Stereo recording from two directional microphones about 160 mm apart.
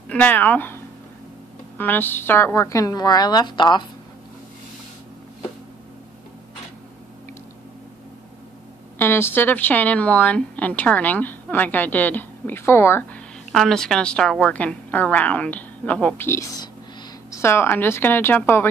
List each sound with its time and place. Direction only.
0.1 s speech: 10° left (ahead or behind)
1.8 s a woman's voice: 10° left (ahead or behind); by 3.8 s 30° left (ahead or behind)
8.9 s speech: 15° left (ahead or behind)
13.5 s speech: centre (ahead or behind)